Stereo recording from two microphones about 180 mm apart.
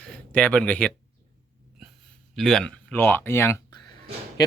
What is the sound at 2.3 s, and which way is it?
Speech, centre (ahead or behind).